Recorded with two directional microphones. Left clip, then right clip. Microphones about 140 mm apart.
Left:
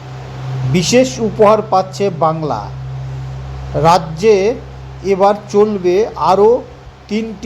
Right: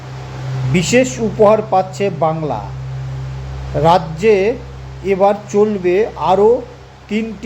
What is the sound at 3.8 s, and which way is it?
A man's voice, 20° left (ahead or behind).